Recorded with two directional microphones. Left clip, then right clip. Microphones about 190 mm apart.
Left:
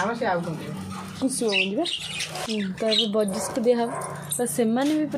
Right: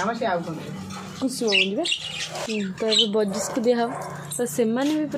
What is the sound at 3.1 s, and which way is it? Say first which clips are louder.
A woman's voice: right 1 dB; 15° right (ahead or behind).